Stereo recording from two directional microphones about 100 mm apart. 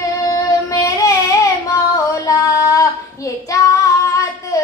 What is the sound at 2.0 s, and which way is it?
Female singing, 35° left (ahead or behind).